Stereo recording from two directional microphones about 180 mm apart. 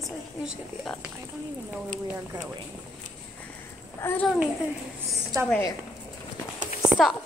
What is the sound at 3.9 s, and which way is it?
Speech, 15° left (ahead or behind).